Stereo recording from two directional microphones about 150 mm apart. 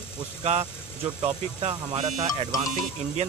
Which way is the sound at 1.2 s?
45° right (ahead or behind).